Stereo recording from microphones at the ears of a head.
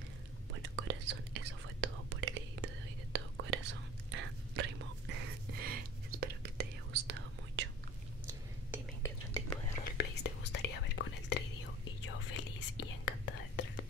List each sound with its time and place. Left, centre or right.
0.6 s whispering: right
9.9 s whispering: left